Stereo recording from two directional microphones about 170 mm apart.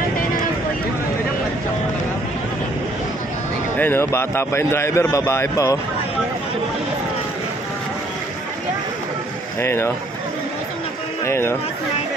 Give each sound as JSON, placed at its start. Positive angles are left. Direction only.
{"t": 3.7, "sound": "a man's voice", "side_deg": 10}
{"t": 9.6, "sound": "a man's voice", "side_deg": 15}
{"t": 11.2, "sound": "a man's voice", "side_deg": 15}